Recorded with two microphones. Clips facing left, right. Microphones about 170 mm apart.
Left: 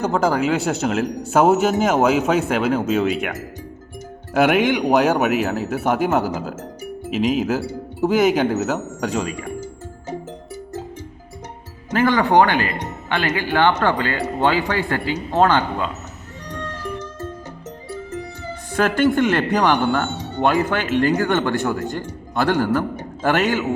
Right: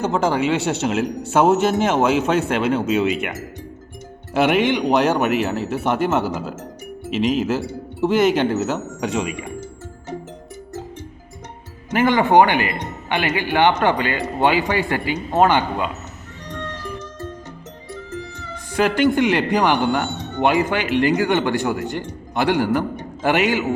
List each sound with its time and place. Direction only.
0.0 s a man's voice: centre (ahead or behind)
4.4 s a man's voice: centre (ahead or behind)
7.2 s a man's voice: centre (ahead or behind)
11.9 s speech: 20° right (ahead or behind)
18.8 s speech: 15° right (ahead or behind)